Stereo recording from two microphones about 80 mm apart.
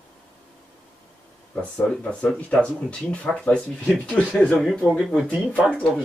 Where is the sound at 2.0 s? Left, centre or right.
Centre.